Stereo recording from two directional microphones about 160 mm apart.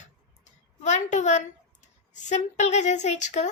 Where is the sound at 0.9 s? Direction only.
45° left (ahead or behind).